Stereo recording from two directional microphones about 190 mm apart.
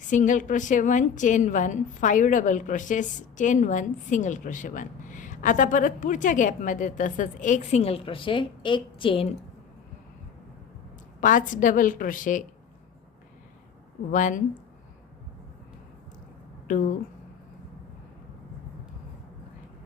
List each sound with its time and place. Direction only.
0.1 s a woman's voice: 40° left (ahead or behind)
11.2 s a woman's voice: 45° left (ahead or behind)
14.1 s a woman's voice: 45° left (ahead or behind)